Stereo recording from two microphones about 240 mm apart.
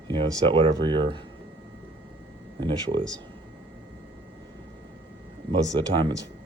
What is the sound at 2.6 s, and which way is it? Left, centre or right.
Speech, centre.